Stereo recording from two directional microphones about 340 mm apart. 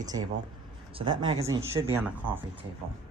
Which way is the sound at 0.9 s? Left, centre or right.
Centre.